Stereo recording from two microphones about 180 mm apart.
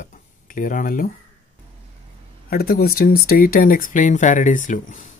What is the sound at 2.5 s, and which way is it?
Speech, 60° left (ahead or behind).